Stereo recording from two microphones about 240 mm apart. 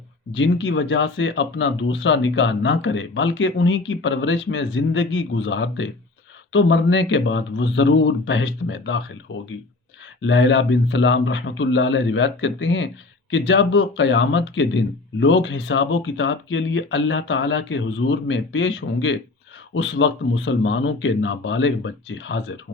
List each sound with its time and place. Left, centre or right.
0.3 s speech: left